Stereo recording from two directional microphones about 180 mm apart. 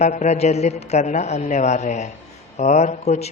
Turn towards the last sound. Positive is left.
turn(degrees=35)  # may be behind; listen again after turning